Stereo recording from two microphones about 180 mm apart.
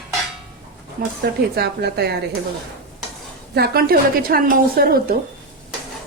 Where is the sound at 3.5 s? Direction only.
60° right (ahead or behind).